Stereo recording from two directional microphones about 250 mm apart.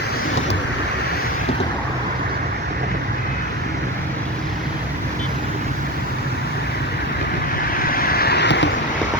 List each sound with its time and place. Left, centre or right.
7.9 s vehicle: left